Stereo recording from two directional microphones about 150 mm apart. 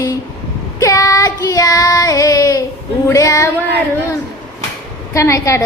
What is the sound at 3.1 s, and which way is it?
Female singing, 20° left (ahead or behind).